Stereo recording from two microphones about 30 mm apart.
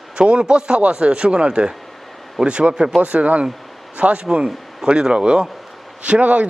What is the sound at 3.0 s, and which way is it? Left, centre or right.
A man's voice, right.